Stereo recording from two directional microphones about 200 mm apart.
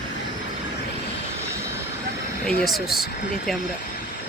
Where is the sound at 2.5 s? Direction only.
Centre (ahead or behind).